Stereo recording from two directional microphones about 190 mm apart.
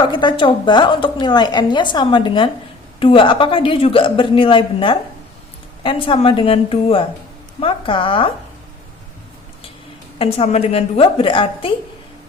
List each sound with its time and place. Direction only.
0.0 s a woman's voice: 25° left (ahead or behind)
10.2 s a woman's voice: 30° left (ahead or behind)